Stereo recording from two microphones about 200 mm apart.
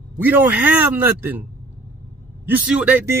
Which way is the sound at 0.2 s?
10° right (ahead or behind).